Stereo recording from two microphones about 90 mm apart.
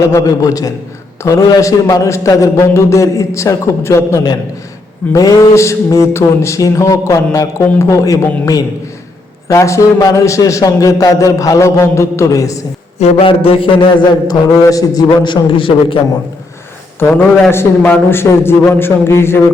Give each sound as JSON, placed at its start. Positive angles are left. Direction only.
{"t": 0.1, "sound": "a sound", "side_deg": 40}
{"t": 13.1, "sound": "a man's voice", "side_deg": 90}
{"t": 14.3, "sound": "a man's voice", "side_deg": 40}
{"t": 17.0, "sound": "a man's voice", "side_deg": 25}